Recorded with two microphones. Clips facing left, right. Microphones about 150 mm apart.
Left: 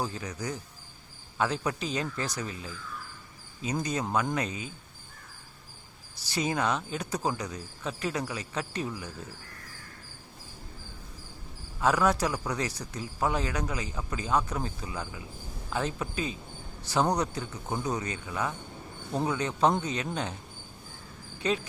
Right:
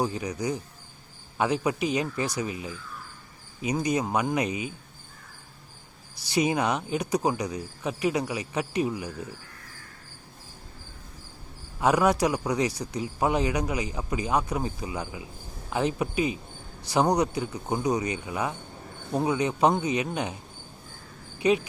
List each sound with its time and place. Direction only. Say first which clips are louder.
0.0 s speech: right 6 dB; 15° right (ahead or behind)
6.3 s speech: right 4 dB; 15° right (ahead or behind)
11.8 s speech: right 3 dB; 15° right (ahead or behind)
21.3 s speech: right 6 dB; 15° right (ahead or behind)